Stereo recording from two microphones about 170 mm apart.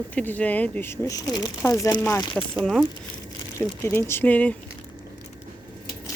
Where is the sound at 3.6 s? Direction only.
15° left (ahead or behind).